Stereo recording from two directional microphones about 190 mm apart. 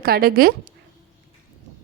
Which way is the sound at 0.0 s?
55° right (ahead or behind).